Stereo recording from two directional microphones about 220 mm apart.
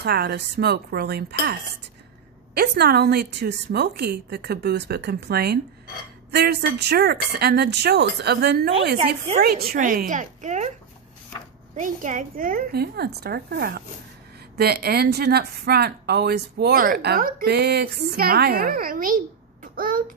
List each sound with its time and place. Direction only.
0.0 s a woman's voice: 45° right (ahead or behind)
11.7 s speech: 35° right (ahead or behind)